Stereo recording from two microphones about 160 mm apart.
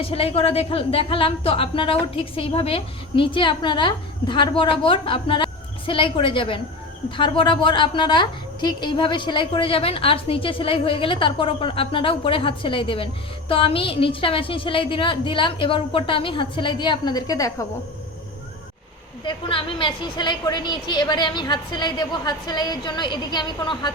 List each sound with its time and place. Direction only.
0.0 s a woman's voice: 35° left (ahead or behind); by 17.7 s 20° left (ahead or behind)
19.2 s a woman's voice: 30° left (ahead or behind)